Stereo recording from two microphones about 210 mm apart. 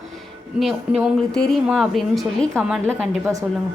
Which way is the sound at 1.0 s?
5° right (ahead or behind).